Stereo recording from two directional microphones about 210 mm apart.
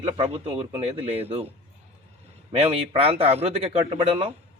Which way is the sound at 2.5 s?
30° right (ahead or behind).